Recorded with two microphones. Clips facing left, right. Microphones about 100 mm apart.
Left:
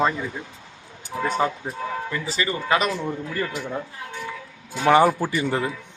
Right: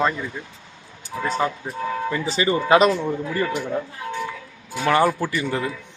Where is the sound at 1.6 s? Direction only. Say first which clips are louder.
Right 1 dB; 20° left (ahead or behind).